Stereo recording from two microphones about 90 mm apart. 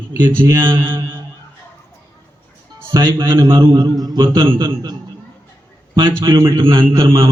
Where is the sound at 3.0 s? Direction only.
55° right (ahead or behind).